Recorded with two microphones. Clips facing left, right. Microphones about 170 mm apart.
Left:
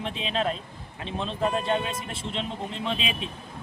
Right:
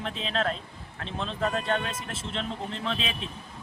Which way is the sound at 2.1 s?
10° left (ahead or behind).